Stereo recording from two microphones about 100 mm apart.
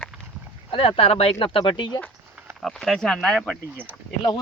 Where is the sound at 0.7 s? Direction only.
70° left (ahead or behind).